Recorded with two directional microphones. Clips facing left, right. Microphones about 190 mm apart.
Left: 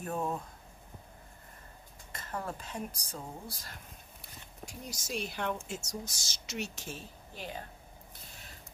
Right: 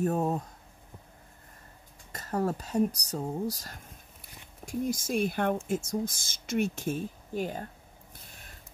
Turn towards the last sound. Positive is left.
turn(degrees=-45)  # may be behind; listen again after turning